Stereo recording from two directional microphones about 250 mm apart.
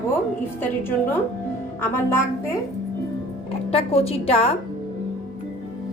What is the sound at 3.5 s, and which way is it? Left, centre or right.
Speech, left.